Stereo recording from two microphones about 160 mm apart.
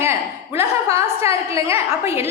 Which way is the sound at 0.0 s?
15° right (ahead or behind).